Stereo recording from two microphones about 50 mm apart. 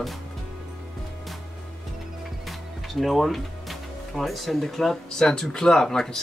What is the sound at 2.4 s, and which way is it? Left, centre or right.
Speech, centre.